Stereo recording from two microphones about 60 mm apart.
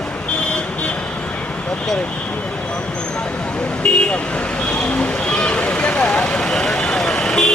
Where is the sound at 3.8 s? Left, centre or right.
Centre.